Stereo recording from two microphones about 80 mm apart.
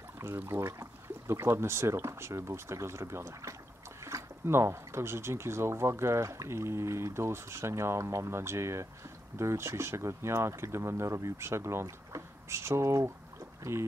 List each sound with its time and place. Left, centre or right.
0.5 s speech: right